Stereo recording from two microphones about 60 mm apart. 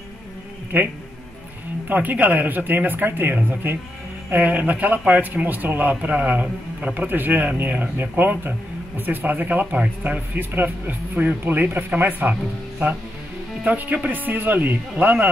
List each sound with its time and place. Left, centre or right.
0.7 s a man's voice: right
13.7 s a man's voice: right